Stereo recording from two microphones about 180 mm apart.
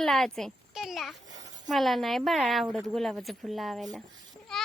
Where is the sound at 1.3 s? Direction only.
90° right.